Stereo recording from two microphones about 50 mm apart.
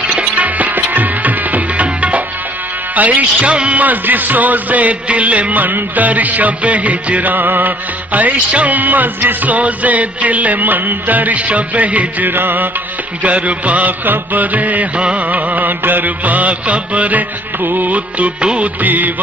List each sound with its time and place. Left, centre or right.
0.0 s music: right
2.9 s a man's voice: right